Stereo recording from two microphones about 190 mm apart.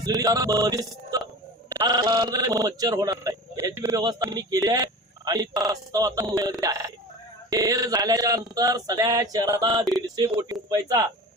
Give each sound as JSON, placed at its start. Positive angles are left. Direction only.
{"t": 0.0, "sound": "a man's voice", "side_deg": -20}